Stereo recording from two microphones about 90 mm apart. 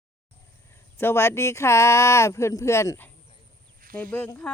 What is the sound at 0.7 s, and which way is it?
Speech, 25° left (ahead or behind).